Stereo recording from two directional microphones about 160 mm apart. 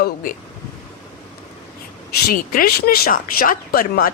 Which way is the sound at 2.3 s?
70° left (ahead or behind).